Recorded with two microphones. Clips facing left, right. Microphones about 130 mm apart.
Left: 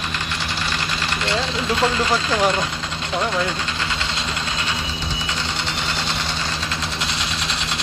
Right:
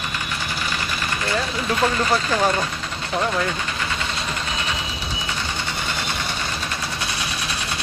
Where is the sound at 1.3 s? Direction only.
20° left (ahead or behind).